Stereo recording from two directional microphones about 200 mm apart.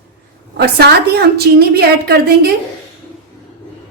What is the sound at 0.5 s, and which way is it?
A woman's voice, 55° right (ahead or behind).